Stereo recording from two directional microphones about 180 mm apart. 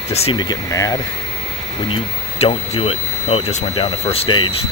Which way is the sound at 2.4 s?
35° left (ahead or behind).